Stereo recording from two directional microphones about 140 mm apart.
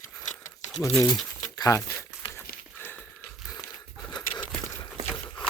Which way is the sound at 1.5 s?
20° left (ahead or behind).